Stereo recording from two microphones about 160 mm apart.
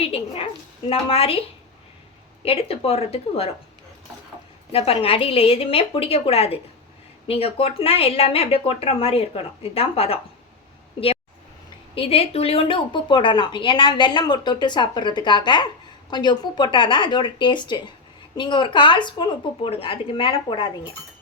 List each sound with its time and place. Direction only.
0.0 s a woman's voice: 40° left (ahead or behind)
4.7 s speech: 40° left (ahead or behind)
11.9 s speech: 40° left (ahead or behind)